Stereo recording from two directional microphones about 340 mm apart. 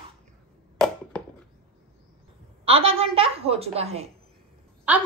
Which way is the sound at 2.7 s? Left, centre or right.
Centre.